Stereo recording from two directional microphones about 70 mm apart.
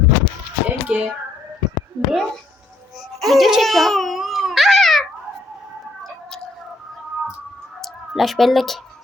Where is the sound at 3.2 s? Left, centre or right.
Centre.